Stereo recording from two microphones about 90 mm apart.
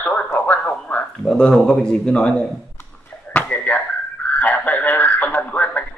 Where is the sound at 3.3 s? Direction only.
15° left (ahead or behind).